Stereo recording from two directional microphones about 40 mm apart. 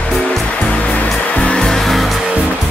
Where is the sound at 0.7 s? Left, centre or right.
Left.